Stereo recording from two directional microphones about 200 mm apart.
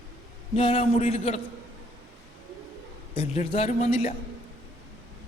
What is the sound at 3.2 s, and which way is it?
Speech, 30° left (ahead or behind).